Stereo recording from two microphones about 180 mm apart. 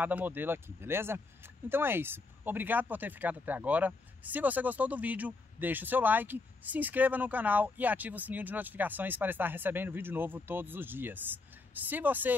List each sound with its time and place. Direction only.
0.0 s speech: 10° right (ahead or behind)